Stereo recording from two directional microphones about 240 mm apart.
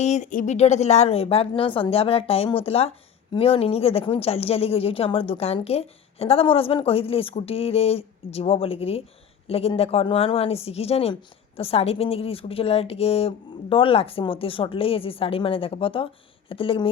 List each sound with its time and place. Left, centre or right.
0.0 s speech: left